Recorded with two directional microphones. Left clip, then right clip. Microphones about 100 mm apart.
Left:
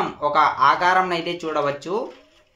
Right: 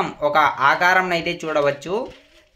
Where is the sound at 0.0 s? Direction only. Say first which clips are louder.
Right 1 dB; 25° right (ahead or behind).